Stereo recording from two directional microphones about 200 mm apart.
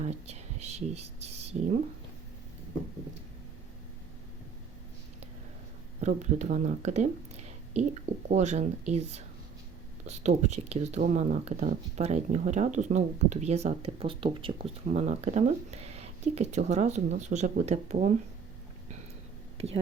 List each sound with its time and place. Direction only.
0.0 s speech: 35° right (ahead or behind)
6.0 s speech: 35° right (ahead or behind)
19.5 s speech: 30° right (ahead or behind)